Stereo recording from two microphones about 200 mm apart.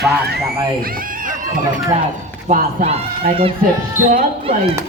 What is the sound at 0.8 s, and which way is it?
Speech, 45° right (ahead or behind).